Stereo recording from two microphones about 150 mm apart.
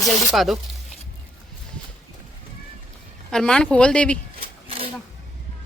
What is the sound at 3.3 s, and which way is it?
Speech, 5° left (ahead or behind).